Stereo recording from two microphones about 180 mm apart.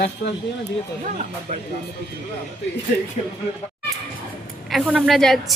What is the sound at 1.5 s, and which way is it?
Speech, 45° right (ahead or behind).